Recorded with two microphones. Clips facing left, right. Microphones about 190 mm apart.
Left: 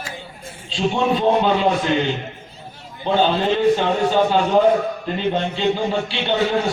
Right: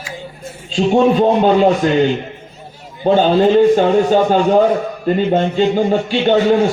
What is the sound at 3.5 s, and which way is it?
Speech, 45° right (ahead or behind).